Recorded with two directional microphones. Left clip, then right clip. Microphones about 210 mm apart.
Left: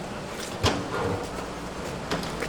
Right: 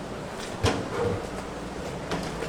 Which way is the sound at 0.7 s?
30° left (ahead or behind).